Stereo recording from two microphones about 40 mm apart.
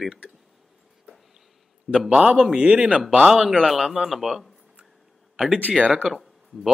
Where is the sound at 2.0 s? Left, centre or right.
Right.